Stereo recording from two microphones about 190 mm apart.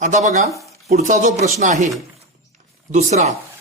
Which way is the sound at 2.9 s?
35° right (ahead or behind).